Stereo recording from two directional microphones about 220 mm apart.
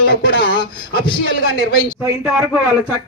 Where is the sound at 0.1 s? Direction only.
50° left (ahead or behind).